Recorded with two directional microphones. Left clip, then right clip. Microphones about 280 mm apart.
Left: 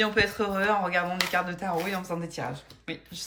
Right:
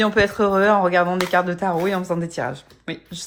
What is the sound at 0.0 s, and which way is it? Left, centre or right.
Speech, centre.